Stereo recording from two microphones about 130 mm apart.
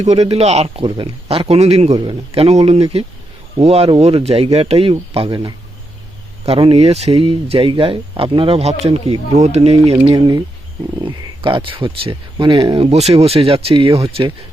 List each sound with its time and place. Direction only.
0.0 s speech: 55° right (ahead or behind)
0.9 s speech: 40° right (ahead or behind)
10.0 s speech: 35° right (ahead or behind)